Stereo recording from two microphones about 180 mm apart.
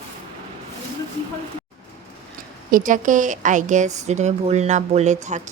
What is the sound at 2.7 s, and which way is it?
A woman's voice, 45° right (ahead or behind).